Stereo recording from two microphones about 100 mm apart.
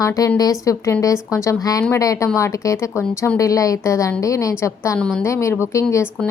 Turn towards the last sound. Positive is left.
turn(degrees=30)  # may be behind; listen again after turning